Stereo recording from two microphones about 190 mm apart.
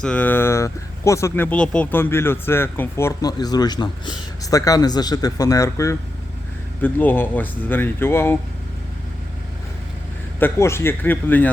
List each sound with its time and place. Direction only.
0.0 s speech: 10° left (ahead or behind)
10.4 s speech: 15° left (ahead or behind)